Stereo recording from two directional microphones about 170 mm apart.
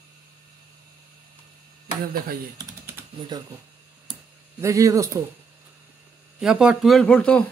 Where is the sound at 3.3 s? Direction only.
25° right (ahead or behind).